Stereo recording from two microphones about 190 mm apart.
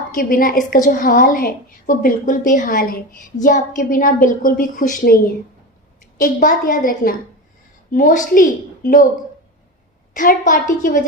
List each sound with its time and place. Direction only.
0.2 s a woman's voice: 50° left (ahead or behind)
10.2 s a woman's voice: 45° left (ahead or behind)